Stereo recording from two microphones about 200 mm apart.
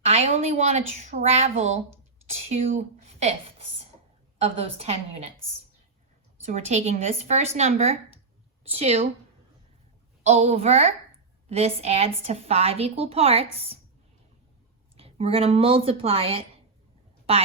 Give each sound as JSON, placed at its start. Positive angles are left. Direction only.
{"t": 0.0, "sound": "a woman's voice", "side_deg": -30}
{"t": 4.9, "sound": "a woman's voice", "side_deg": -30}
{"t": 6.4, "sound": "a woman's voice", "side_deg": -35}
{"t": 10.2, "sound": "a woman's voice", "side_deg": -35}
{"t": 14.9, "sound": "speech", "side_deg": -30}